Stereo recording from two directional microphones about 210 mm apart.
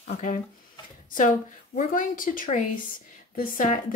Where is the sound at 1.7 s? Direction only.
40° left (ahead or behind).